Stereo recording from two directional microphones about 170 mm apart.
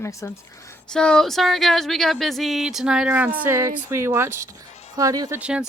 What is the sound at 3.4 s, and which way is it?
Speech, 15° right (ahead or behind).